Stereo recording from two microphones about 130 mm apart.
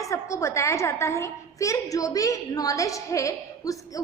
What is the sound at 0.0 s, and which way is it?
A woman's voice, 25° left (ahead or behind).